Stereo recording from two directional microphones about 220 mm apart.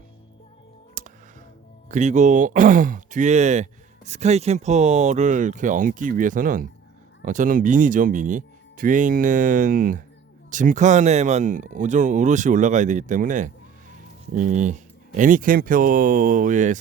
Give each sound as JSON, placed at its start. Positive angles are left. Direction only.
{"t": 1.0, "sound": "music", "side_deg": -35}
{"t": 1.9, "sound": "speech", "side_deg": -35}